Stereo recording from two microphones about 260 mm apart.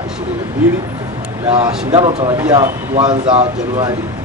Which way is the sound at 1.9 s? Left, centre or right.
Right.